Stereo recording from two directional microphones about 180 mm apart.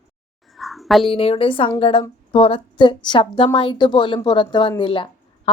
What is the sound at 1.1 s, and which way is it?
A woman's voice, 30° left (ahead or behind).